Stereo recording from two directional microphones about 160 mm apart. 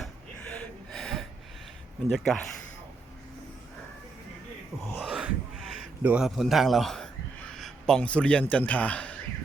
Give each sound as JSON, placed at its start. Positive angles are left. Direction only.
{"t": 0.5, "sound": "gasp", "side_deg": 5}
{"t": 2.0, "sound": "a man's voice", "side_deg": 0}
{"t": 4.9, "sound": "a sound", "side_deg": -5}
{"t": 7.5, "sound": "a man's voice", "side_deg": 5}